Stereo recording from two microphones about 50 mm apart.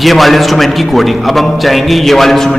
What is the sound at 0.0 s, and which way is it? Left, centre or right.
A man's voice, centre.